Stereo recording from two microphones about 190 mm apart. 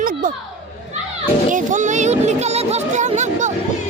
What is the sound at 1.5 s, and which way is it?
Speech, 40° right (ahead or behind).